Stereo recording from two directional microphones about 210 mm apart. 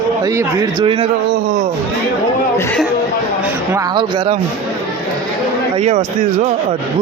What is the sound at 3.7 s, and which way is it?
Speech, 20° right (ahead or behind).